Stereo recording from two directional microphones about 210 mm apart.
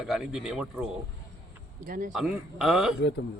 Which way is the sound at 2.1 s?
Centre (ahead or behind).